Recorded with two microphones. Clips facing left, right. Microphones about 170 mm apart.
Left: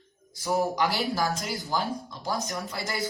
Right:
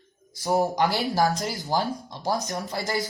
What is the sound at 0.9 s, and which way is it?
Speech, 40° right (ahead or behind).